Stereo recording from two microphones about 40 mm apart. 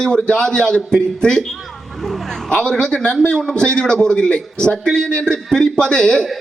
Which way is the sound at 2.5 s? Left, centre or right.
Left.